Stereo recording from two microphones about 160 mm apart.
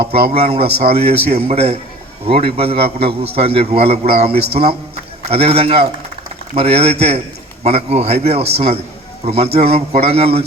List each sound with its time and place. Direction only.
0.0 s a man's voice: 35° right (ahead or behind)